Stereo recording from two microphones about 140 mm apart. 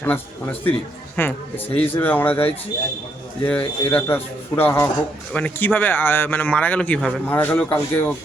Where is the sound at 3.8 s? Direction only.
15° left (ahead or behind).